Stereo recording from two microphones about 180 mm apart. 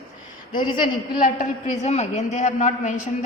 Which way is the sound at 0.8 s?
45° left (ahead or behind).